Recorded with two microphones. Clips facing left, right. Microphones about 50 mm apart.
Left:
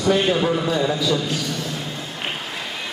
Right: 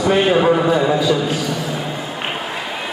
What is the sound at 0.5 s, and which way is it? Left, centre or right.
Speech, right.